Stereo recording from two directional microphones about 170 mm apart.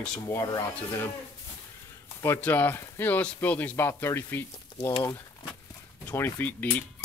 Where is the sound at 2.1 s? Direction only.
10° left (ahead or behind).